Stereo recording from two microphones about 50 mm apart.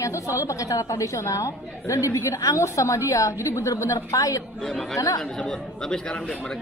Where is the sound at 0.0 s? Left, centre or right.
Left.